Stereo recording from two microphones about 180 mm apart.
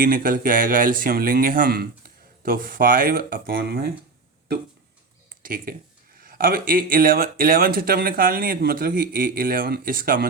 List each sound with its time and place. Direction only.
0.0 s speech: 50° right (ahead or behind)
5.4 s speech: 50° right (ahead or behind)